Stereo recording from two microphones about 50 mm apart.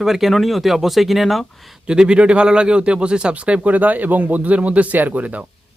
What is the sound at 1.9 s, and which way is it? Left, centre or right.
Speech, centre.